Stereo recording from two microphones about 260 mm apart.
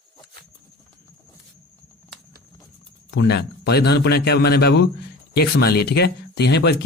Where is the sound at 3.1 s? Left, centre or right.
Left.